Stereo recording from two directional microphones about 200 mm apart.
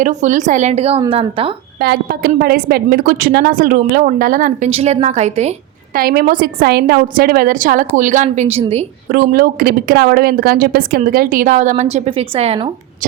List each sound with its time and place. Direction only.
0.0 s a woman's voice: 40° right (ahead or behind)
1.8 s a woman's voice: 50° right (ahead or behind)
4.7 s a woman's voice: 30° right (ahead or behind)
6.0 s a woman's voice: 45° right (ahead or behind); by 8.8 s 30° right (ahead or behind)
9.1 s a woman's voice: 50° right (ahead or behind); by 13.1 s 30° right (ahead or behind)